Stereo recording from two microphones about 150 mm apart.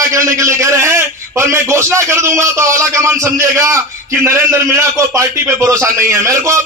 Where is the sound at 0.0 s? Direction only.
20° right (ahead or behind).